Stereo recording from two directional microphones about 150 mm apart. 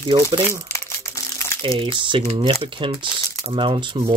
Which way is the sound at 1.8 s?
35° right (ahead or behind).